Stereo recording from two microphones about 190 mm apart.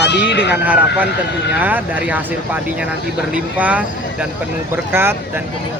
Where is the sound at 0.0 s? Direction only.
60° left (ahead or behind).